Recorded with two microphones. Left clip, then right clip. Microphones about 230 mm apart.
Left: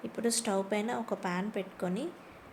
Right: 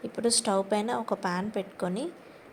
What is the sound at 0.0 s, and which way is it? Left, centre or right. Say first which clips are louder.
A woman's voice: right 5 dB; centre.